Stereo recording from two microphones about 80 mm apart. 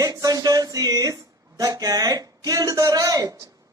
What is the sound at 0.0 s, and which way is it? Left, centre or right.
Speech, right.